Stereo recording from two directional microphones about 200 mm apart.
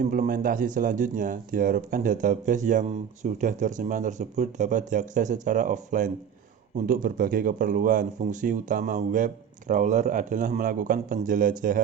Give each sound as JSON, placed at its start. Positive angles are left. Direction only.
{"t": 0.0, "sound": "speech", "side_deg": -40}